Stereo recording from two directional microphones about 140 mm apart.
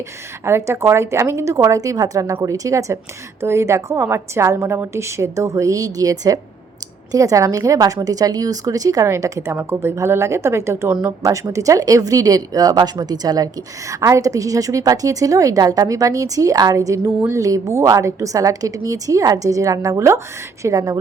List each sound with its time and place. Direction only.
0.4 s a woman's voice: 20° right (ahead or behind)